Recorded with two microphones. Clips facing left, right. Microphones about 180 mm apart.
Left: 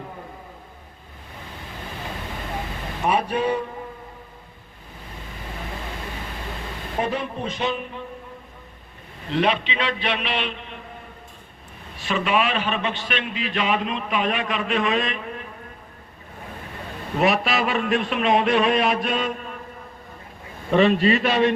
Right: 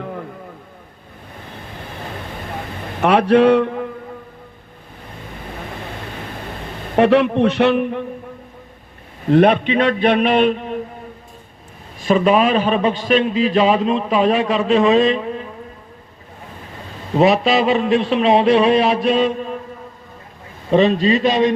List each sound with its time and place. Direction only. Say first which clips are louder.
3.0 s speech: right 10 dB; 75° right (ahead or behind)
6.9 s a man's voice: right 13 dB; 75° right (ahead or behind)
9.2 s a man's voice: right 10 dB; 55° right (ahead or behind)
12.0 s a man's voice: right 8 dB; 40° right (ahead or behind)
17.2 s a man's voice: right 7 dB; 30° right (ahead or behind)
20.7 s a man's voice: right 4 dB; 30° right (ahead or behind)
21.2 s speech: right 6 dB; 15° right (ahead or behind)